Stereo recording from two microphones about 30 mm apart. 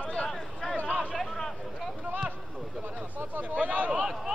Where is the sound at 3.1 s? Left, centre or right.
Right.